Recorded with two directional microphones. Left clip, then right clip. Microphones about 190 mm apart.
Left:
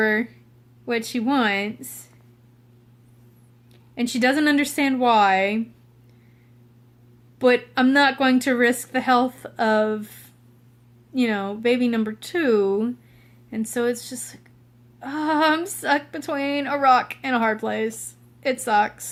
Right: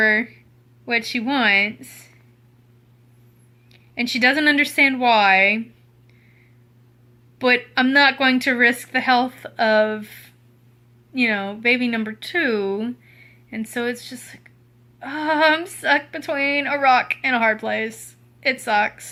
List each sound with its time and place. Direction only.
0.0 s a sound: 5° left (ahead or behind)
0.9 s speech: 5° left (ahead or behind)
3.7 s a woman's voice: 5° left (ahead or behind)
7.3 s a woman's voice: 5° left (ahead or behind)